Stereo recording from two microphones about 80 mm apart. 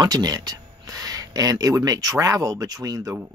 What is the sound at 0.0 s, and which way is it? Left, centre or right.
Speech, right.